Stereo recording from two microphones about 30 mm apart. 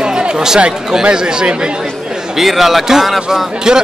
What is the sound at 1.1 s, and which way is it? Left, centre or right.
Speech, right.